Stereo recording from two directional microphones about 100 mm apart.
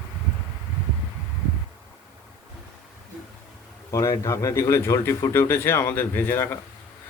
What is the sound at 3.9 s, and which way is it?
Speech, 30° left (ahead or behind).